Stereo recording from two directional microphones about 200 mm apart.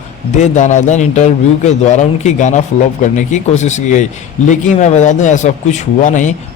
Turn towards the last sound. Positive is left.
turn(degrees=40)  # may be behind; listen again after turning